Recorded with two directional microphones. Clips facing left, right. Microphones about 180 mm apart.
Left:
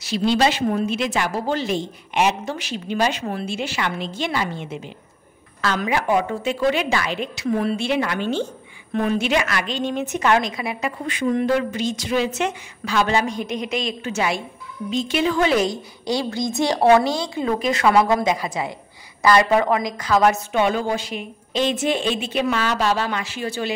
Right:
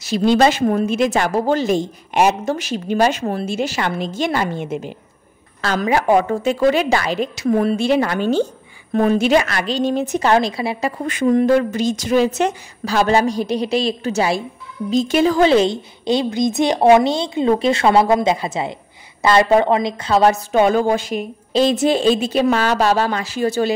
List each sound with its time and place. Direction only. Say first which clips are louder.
0.0 s a woman's voice: right 5 dB; 45° right (ahead or behind)